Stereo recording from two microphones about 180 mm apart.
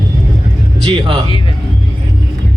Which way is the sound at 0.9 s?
30° right (ahead or behind).